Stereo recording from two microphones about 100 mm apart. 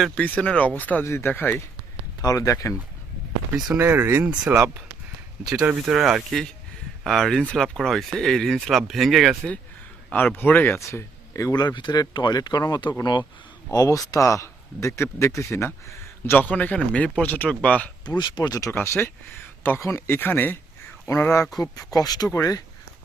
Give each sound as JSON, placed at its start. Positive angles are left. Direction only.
{"t": 0.2, "sound": "speech", "side_deg": 15}
{"t": 2.2, "sound": "speech", "side_deg": 35}
{"t": 3.8, "sound": "speech", "side_deg": -25}
{"t": 5.6, "sound": "speech", "side_deg": -10}
{"t": 10.3, "sound": "speech", "side_deg": 20}
{"t": 11.6, "sound": "speech", "side_deg": 45}
{"t": 13.7, "sound": "speech", "side_deg": 35}
{"t": 18.2, "sound": "speech", "side_deg": 45}
{"t": 18.7, "sound": "speech", "side_deg": 20}
{"t": 21.6, "sound": "speech", "side_deg": 40}